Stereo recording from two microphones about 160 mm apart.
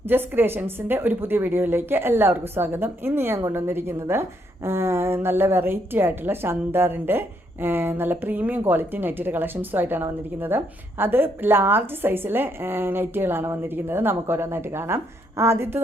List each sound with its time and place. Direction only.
0.0 s a woman's voice: 15° right (ahead or behind)